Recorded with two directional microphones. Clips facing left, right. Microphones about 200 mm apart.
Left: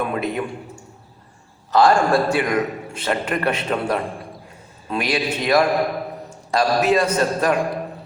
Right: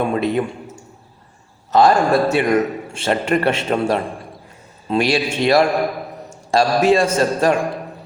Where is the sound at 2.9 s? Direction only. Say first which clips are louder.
Right 5 dB; 25° right (ahead or behind).